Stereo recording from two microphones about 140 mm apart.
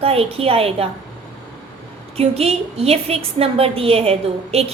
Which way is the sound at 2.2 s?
45° right (ahead or behind).